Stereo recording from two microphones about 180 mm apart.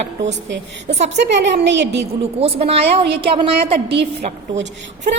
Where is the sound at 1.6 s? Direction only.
80° right.